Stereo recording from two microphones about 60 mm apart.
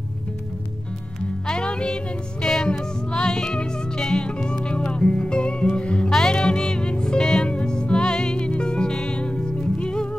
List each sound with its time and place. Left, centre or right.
1.5 s music: centre